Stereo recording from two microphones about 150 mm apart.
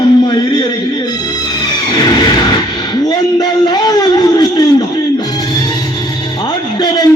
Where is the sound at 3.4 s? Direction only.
25° left (ahead or behind).